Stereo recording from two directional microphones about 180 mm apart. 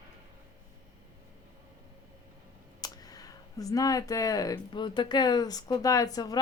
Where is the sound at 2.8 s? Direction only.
20° left (ahead or behind).